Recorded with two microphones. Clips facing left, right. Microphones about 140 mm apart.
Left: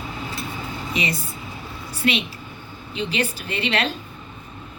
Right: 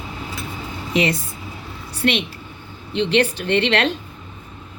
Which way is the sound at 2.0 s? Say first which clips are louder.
Right 3 dB; 60° right (ahead or behind).